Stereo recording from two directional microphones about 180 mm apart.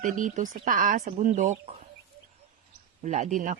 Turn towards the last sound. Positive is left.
turn(degrees=-45)  # may be behind; listen again after turning